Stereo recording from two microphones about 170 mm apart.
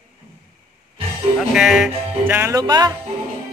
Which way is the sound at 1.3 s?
Centre (ahead or behind).